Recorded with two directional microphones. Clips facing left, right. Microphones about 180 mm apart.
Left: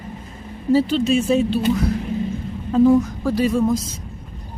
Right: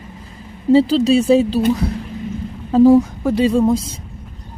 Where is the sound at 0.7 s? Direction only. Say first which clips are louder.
Right 5 dB; 30° right (ahead or behind).